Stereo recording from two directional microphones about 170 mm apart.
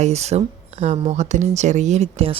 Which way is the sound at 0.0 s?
40° right (ahead or behind).